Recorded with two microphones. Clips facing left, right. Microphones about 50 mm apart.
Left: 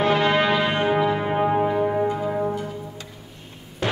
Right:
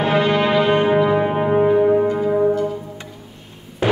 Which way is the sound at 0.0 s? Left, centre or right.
Centre.